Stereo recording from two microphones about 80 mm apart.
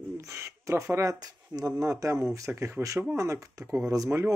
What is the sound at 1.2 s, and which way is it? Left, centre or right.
Speech, right.